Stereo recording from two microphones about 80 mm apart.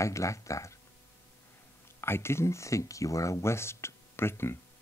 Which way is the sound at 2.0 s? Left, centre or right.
Left.